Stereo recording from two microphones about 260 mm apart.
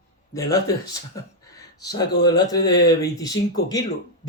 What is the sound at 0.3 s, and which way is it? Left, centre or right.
A man's voice, centre.